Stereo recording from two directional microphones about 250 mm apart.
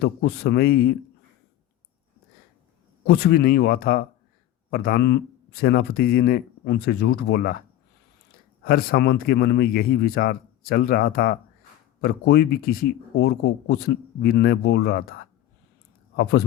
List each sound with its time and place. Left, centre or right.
0.0 s speech: left
3.1 s speech: left
8.6 s speech: left
16.1 s speech: left